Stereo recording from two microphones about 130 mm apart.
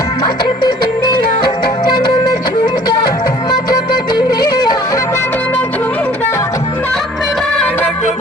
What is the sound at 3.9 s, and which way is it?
Music, 30° left (ahead or behind).